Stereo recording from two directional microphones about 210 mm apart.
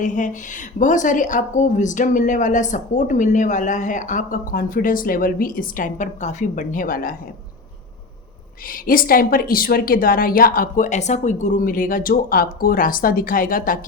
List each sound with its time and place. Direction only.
0.0 s a woman's voice: 35° left (ahead or behind)
8.7 s a woman's voice: 40° left (ahead or behind)